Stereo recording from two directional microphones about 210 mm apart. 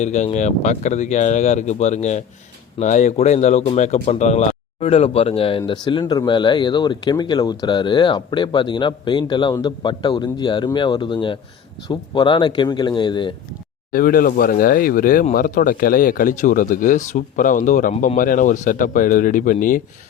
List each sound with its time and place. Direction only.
0.0 s speech: 35° left (ahead or behind)
13.9 s speech: 40° left (ahead or behind)